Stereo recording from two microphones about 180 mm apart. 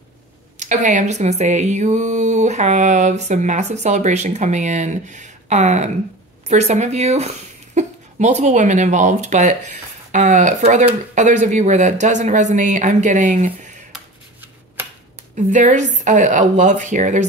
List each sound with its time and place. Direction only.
0.6 s speech: 45° right (ahead or behind)
13.9 s a sound: 10° right (ahead or behind)
15.3 s speech: 45° right (ahead or behind)